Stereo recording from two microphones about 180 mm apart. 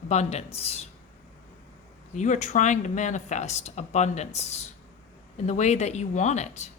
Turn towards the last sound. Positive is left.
turn(degrees=40)  # may be behind; listen again after turning